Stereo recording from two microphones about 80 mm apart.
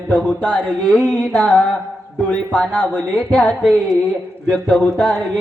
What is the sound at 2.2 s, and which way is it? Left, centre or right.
Speech, left.